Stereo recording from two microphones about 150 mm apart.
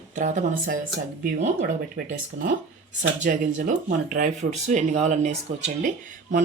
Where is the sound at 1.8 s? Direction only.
80° right.